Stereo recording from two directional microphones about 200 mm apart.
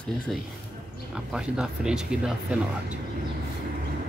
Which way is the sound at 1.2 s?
5° right (ahead or behind).